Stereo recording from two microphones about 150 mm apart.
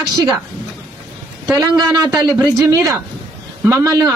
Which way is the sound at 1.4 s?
25° right (ahead or behind).